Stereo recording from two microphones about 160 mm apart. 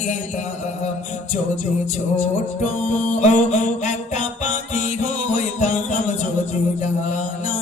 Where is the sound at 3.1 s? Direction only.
45° left (ahead or behind).